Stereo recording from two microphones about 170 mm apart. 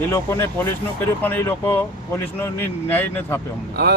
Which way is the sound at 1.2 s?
10° left (ahead or behind).